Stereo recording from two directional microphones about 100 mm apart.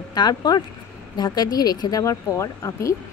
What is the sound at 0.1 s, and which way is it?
Speech, 45° left (ahead or behind).